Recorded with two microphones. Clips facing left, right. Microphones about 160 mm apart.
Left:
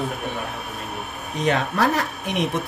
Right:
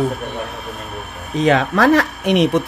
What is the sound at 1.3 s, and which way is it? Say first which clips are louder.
Speech: right 7 dB; 90° right.